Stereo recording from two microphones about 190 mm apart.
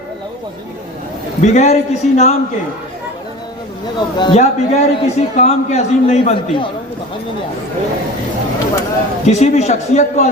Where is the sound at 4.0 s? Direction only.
25° left (ahead or behind).